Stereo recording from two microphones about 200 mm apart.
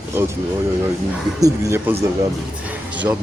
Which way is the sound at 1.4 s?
15° right (ahead or behind).